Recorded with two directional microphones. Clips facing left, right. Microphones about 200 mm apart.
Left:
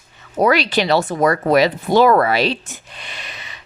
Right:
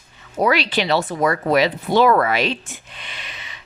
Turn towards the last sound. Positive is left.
turn(degrees=40)  # may be behind; listen again after turning